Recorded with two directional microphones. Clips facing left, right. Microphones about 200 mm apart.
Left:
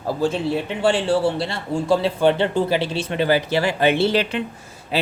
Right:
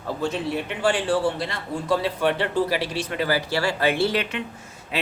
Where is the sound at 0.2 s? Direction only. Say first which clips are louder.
Left 4 dB; 30° left (ahead or behind).